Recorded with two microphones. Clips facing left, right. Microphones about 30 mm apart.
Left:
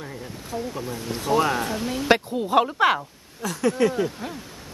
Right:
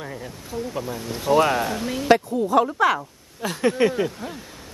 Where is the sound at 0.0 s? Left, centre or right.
Centre.